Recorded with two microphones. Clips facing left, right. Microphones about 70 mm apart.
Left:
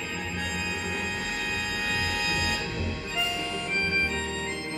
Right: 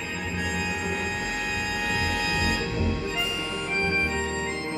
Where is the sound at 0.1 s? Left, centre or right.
Centre.